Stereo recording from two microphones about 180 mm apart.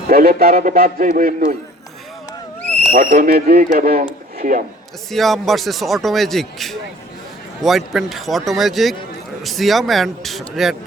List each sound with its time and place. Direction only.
0.1 s a man's voice: 55° right (ahead or behind)
2.6 s owl: 10° left (ahead or behind)
2.9 s speech: 55° right (ahead or behind)
5.1 s speech: centre (ahead or behind)